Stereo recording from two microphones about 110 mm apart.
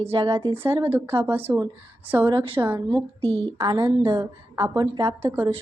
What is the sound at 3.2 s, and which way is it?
Speech, 65° right (ahead or behind).